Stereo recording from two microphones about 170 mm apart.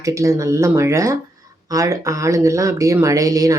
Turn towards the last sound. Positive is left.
turn(degrees=-20)  # may be behind; listen again after turning